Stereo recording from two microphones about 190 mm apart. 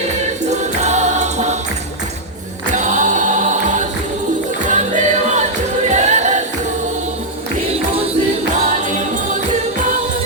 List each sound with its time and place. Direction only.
0.5 s music: 35° right (ahead or behind)
2.7 s choir: 40° right (ahead or behind)
4.7 s music: 40° right (ahead or behind)
5.9 s choir: 35° right (ahead or behind)